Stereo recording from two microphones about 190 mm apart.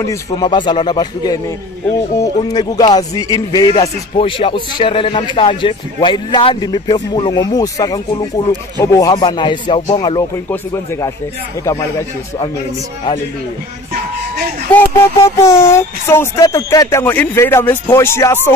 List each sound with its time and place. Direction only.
0.3 s a man's voice: 25° left (ahead or behind)
2.4 s a man's voice: 20° left (ahead or behind)
14.7 s speech: 15° left (ahead or behind)